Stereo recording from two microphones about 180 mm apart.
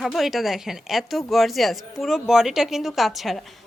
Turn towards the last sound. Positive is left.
turn(degrees=0)  # may be behind; listen again after turning